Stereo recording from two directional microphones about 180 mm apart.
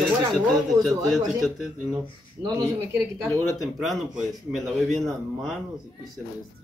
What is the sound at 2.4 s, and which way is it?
Speech, 15° right (ahead or behind).